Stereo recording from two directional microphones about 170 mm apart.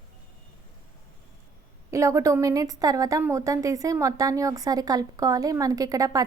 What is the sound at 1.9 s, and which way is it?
A woman's voice, 15° right (ahead or behind).